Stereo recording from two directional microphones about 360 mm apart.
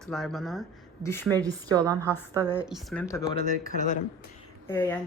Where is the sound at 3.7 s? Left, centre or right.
Centre.